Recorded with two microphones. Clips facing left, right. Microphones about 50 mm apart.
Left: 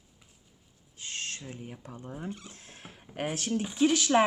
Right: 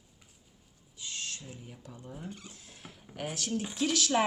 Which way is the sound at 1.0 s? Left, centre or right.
Left.